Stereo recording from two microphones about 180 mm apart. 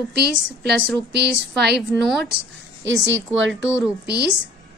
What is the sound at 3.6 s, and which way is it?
Speech, 65° right (ahead or behind).